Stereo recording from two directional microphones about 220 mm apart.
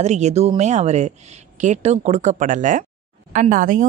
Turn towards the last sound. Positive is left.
turn(degrees=-40)  # may be behind; listen again after turning